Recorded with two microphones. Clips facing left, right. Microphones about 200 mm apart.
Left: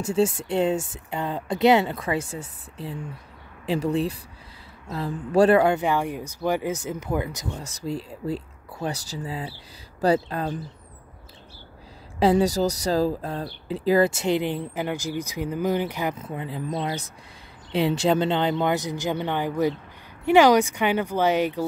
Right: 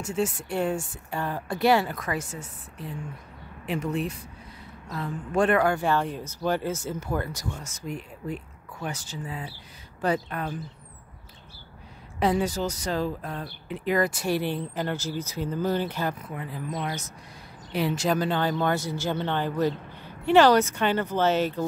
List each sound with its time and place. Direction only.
0.0 s speech: 30° left (ahead or behind)
5.6 s speech: 20° left (ahead or behind)
7.6 s speech: 35° left (ahead or behind)
12.2 s speech: 35° left (ahead or behind); by 21.6 s 15° left (ahead or behind)